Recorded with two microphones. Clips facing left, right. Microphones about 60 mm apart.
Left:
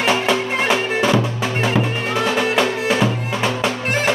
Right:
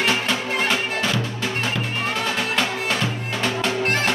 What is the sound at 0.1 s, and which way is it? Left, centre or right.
Music, centre.